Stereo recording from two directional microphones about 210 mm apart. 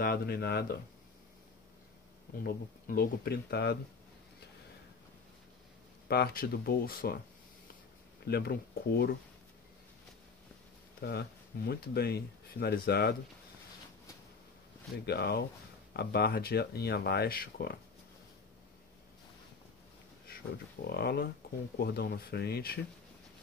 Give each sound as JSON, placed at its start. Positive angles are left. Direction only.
{"t": 0.0, "sound": "speech", "side_deg": 45}
{"t": 2.4, "sound": "speech", "side_deg": 45}
{"t": 6.0, "sound": "speech", "side_deg": 50}
{"t": 8.3, "sound": "speech", "side_deg": 50}
{"t": 11.0, "sound": "speech", "side_deg": 50}
{"t": 15.0, "sound": "speech", "side_deg": 50}
{"t": 20.8, "sound": "speech", "side_deg": 50}